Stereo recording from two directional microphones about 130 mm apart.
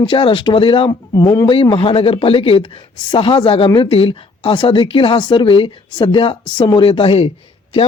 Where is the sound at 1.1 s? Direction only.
25° left (ahead or behind).